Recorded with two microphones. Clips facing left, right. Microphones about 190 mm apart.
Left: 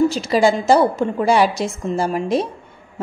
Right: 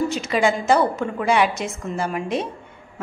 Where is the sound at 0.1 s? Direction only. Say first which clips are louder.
Left 4 dB; 35° left (ahead or behind).